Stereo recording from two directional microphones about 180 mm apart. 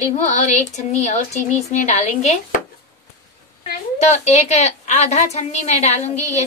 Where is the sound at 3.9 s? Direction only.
40° left (ahead or behind).